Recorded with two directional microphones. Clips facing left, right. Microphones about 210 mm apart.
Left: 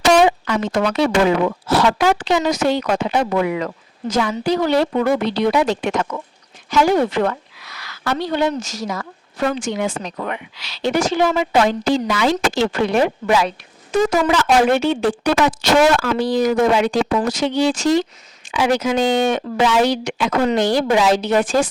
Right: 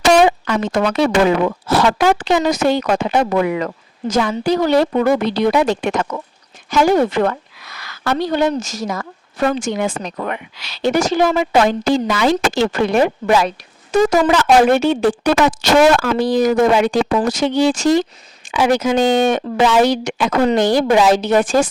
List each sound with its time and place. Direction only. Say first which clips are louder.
0.3 s a woman's voice: right 1 dB; 50° right (ahead or behind)